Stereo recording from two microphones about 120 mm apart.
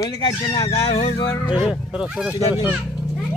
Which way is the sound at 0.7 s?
55° left (ahead or behind).